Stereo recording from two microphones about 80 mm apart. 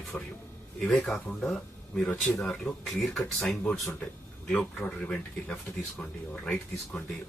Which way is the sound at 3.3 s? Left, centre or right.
Centre.